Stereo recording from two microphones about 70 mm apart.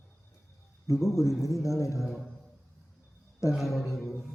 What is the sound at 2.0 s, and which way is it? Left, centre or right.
Speech, centre.